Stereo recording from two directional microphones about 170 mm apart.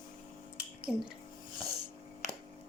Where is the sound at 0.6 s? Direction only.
5° right (ahead or behind).